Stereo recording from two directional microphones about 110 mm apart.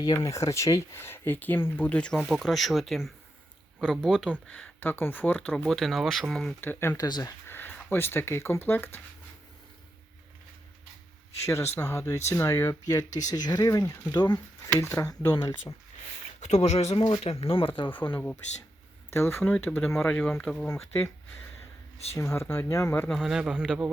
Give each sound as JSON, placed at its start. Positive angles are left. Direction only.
{"t": 0.0, "sound": "speech", "side_deg": 35}
{"t": 4.3, "sound": "speech", "side_deg": 10}
{"t": 6.6, "sound": "speech", "side_deg": 20}
{"t": 7.0, "sound": "speech", "side_deg": 35}
{"t": 7.4, "sound": "speech", "side_deg": 20}
{"t": 11.4, "sound": "speech", "side_deg": 25}
{"t": 14.7, "sound": "speech", "side_deg": 25}
{"t": 16.4, "sound": "speech", "side_deg": 85}
{"t": 17.2, "sound": "speech", "side_deg": 60}
{"t": 17.9, "sound": "speech", "side_deg": 15}
{"t": 20.7, "sound": "speech", "side_deg": 20}
{"t": 21.9, "sound": "speech", "side_deg": 70}
{"t": 22.2, "sound": "speech", "side_deg": 25}
{"t": 23.0, "sound": "speech", "side_deg": 0}